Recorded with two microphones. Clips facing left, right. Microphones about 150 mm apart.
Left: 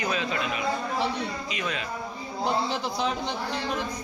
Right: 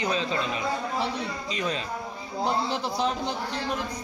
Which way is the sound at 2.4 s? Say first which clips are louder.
Even; centre (ahead or behind).